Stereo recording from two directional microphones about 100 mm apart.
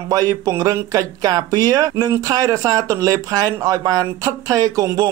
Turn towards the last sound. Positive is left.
turn(degrees=-35)  # may be behind; listen again after turning